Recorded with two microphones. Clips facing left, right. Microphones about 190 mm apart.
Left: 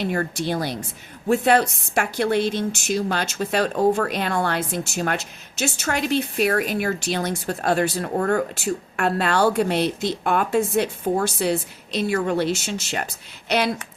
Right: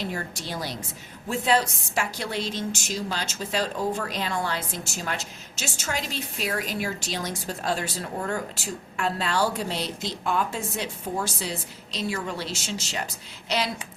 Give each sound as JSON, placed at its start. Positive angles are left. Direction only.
{"t": 0.0, "sound": "a woman's voice", "side_deg": 60}